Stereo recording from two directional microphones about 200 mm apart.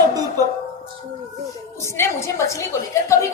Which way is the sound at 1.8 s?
15° left (ahead or behind).